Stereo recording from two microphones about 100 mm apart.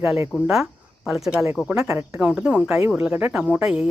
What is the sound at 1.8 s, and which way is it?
Speech, 25° right (ahead or behind).